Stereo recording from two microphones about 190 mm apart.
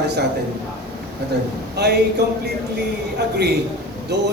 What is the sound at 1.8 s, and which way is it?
Speech, 60° right (ahead or behind).